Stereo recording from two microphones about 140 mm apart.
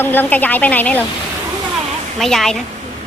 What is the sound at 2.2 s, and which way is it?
Speech, 5° left (ahead or behind).